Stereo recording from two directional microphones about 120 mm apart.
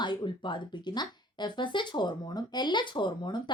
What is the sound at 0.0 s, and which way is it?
Speech, 40° left (ahead or behind).